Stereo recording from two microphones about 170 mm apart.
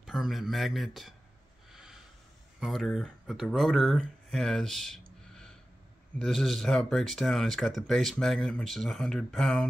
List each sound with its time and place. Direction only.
0.0 s speech: centre (ahead or behind)
1.7 s snort: 5° right (ahead or behind)
2.6 s speech: centre (ahead or behind)
5.3 s a sound: 5° left (ahead or behind)
6.1 s speech: centre (ahead or behind)